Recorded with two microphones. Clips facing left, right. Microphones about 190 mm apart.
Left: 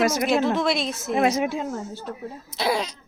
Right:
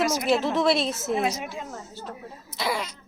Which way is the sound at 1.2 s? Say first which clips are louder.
Left 6 dB; 60° left (ahead or behind).